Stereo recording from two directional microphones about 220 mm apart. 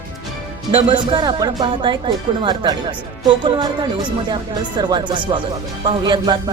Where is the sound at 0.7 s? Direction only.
25° right (ahead or behind).